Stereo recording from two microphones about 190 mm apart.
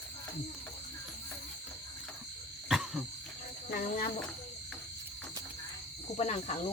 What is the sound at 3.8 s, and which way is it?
Speech, 45° left (ahead or behind).